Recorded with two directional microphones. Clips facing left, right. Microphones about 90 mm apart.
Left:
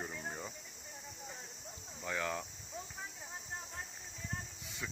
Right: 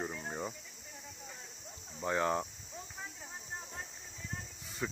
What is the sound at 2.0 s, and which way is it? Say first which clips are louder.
Speech: right 6 dB; 30° right (ahead or behind).